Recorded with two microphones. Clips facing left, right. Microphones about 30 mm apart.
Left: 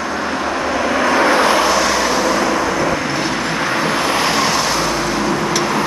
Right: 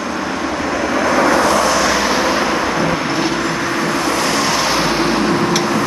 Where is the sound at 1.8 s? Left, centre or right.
Centre.